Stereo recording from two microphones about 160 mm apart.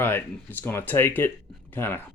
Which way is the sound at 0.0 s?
10° left (ahead or behind).